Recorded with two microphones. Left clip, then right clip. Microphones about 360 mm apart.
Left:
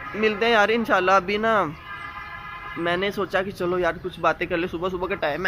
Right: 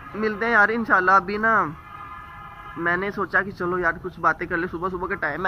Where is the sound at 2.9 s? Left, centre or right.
Centre.